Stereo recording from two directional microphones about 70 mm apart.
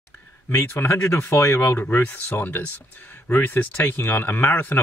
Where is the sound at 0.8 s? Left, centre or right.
Left.